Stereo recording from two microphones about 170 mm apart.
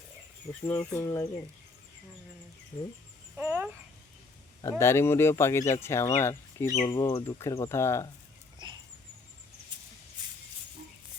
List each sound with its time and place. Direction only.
0.6 s speech: 15° left (ahead or behind)
3.3 s a sound: 10° right (ahead or behind)
4.8 s speech: 15° left (ahead or behind)
6.8 s speech: 25° left (ahead or behind)
7.3 s speech: 15° left (ahead or behind)
8.6 s dog: 25° right (ahead or behind)